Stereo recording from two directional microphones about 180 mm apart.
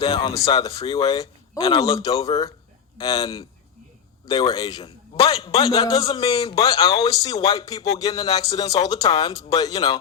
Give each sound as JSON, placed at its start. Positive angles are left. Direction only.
{"t": 0.0, "sound": "speech", "side_deg": 30}
{"t": 1.5, "sound": "a man's voice", "side_deg": 30}
{"t": 3.0, "sound": "a man's voice", "side_deg": 20}
{"t": 5.8, "sound": "speech", "side_deg": 20}
{"t": 6.1, "sound": "a man's voice", "side_deg": 35}
{"t": 6.6, "sound": "speech", "side_deg": 20}
{"t": 9.0, "sound": "a man's voice", "side_deg": 30}
{"t": 9.6, "sound": "speech", "side_deg": 20}